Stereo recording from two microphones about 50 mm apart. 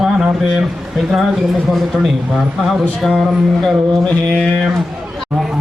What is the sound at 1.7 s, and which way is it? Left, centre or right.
Speech, centre.